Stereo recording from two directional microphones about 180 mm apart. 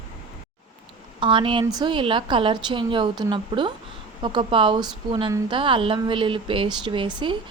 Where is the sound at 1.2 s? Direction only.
25° right (ahead or behind).